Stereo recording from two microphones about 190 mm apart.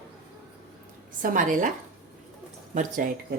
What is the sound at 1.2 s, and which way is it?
Speech, 45° right (ahead or behind).